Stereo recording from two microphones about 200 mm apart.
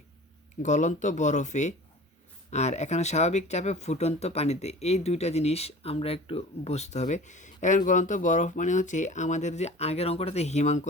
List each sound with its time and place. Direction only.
0.6 s speech: 35° left (ahead or behind)